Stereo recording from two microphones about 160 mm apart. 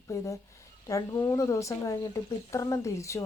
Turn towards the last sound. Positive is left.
turn(degrees=20)  # may be behind; listen again after turning